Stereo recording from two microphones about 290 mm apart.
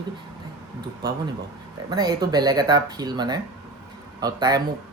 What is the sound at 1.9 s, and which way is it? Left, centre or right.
Speech, centre.